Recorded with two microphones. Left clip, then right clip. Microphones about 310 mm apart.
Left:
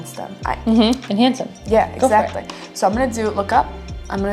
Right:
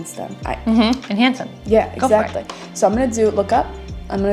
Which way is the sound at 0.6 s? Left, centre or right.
Centre.